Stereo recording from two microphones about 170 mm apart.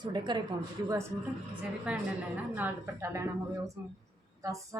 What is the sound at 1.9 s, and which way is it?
Speech, 5° right (ahead or behind).